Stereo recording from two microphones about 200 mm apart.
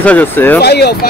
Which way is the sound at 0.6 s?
55° left (ahead or behind).